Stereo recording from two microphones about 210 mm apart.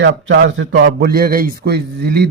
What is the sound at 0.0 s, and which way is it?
A man's voice, 60° right (ahead or behind).